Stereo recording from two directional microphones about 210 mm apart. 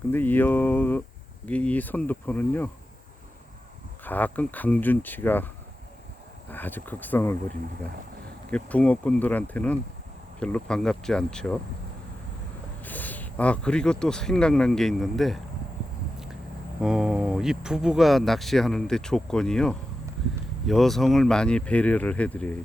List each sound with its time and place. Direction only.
0.1 s speech: 10° left (ahead or behind)
4.0 s speech: 10° left (ahead or behind)
6.5 s speech: 10° left (ahead or behind)
8.4 s speech: 5° left (ahead or behind)
12.8 s speech: 10° left (ahead or behind)
16.8 s speech: 5° right (ahead or behind)